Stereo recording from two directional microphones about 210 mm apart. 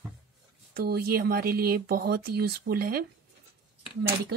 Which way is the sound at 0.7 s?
45° right (ahead or behind).